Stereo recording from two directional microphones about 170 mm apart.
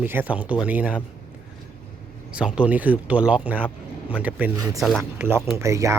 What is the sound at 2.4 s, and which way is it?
Speech, 5° right (ahead or behind).